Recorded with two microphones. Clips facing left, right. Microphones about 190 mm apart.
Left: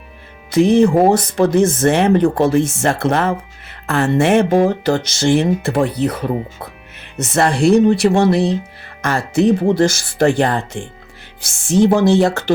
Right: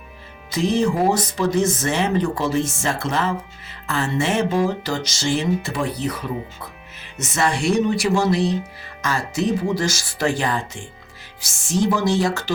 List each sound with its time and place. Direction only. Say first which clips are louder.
0.5 s speech: left 8 dB; 60° left (ahead or behind)